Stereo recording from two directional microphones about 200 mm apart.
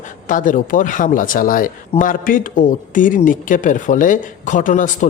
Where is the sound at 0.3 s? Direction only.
40° left (ahead or behind).